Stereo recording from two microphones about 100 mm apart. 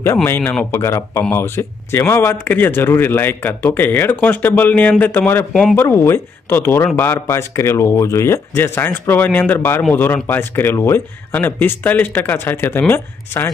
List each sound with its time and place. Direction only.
0.0 s speech: 25° left (ahead or behind)
5.5 s speech: 5° left (ahead or behind)
5.8 s speech: 25° left (ahead or behind)